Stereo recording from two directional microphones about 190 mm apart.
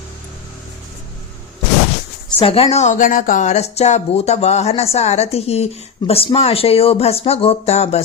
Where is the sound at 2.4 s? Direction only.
30° left (ahead or behind).